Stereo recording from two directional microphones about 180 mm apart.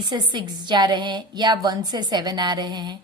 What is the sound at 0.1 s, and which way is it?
A woman's voice, 25° right (ahead or behind).